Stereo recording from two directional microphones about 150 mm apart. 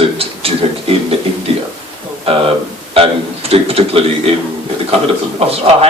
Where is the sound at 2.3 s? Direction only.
40° right (ahead or behind).